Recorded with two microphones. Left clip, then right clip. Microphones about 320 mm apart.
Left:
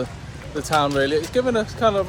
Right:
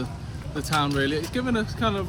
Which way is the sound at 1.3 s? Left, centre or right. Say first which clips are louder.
Left 7 dB; centre.